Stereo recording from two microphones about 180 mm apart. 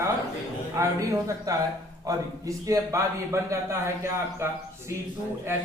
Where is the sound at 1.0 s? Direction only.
20° right (ahead or behind).